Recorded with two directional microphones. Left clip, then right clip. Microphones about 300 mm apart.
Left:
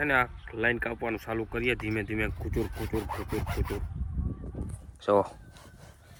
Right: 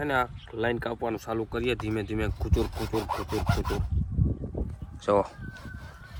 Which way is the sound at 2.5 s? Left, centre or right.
Centre.